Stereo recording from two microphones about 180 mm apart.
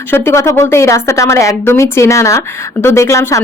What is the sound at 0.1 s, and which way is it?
Speech, 15° left (ahead or behind).